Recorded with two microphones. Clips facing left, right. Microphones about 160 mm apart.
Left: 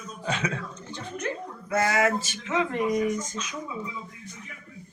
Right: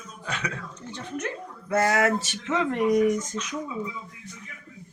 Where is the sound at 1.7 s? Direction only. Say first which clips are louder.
Right 2 dB; 60° right (ahead or behind).